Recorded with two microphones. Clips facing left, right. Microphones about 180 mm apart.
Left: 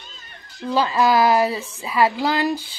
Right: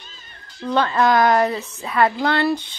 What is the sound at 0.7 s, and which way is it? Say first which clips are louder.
Speech: right 1 dB; 5° left (ahead or behind).